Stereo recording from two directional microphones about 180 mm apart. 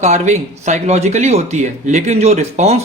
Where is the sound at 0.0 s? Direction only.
40° right (ahead or behind).